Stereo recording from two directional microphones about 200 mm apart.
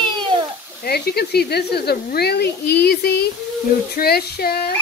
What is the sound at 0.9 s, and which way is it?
Speech, 55° left (ahead or behind).